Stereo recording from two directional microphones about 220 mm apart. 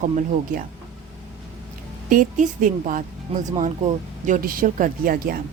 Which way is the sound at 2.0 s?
35° right (ahead or behind).